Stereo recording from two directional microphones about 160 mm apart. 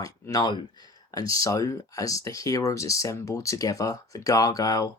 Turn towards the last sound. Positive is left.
turn(degrees=20)  # may be behind; listen again after turning